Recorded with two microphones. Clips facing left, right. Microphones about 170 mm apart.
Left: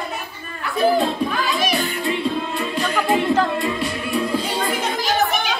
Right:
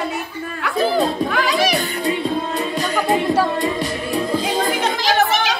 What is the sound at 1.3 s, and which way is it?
Music, 90° right.